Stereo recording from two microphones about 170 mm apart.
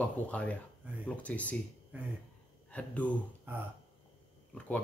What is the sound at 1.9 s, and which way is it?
Speech, 10° right (ahead or behind).